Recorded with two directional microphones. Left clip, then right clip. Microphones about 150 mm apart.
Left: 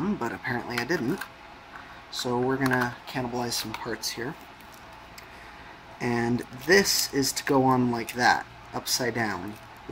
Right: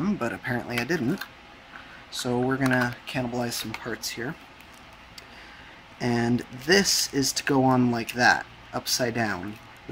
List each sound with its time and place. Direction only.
0.2 s a sound: 10° right (ahead or behind)
0.6 s speech: 25° right (ahead or behind)
2.1 s speech: 25° right (ahead or behind)
5.9 s speech: 20° right (ahead or behind)